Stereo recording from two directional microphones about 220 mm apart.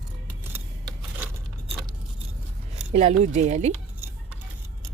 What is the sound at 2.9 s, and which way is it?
Speech, 30° right (ahead or behind).